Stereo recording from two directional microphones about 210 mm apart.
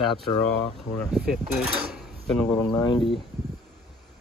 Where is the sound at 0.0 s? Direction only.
25° left (ahead or behind).